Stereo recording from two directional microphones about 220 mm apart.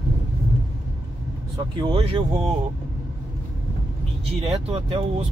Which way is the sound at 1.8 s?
20° right (ahead or behind).